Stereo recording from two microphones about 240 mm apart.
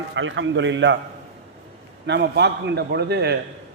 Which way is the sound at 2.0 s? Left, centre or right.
Right.